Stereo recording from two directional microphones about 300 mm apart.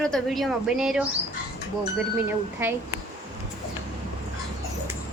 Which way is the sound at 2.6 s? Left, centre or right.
Centre.